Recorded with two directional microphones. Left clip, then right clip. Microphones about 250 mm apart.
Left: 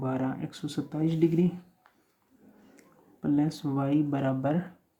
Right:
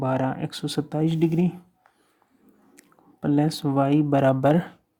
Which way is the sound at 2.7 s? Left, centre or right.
Right.